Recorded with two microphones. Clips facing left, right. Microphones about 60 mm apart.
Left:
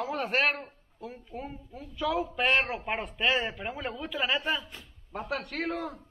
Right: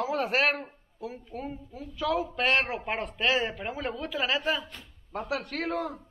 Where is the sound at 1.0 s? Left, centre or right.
Centre.